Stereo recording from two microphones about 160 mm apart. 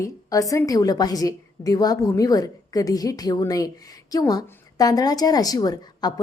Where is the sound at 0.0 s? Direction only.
20° left (ahead or behind).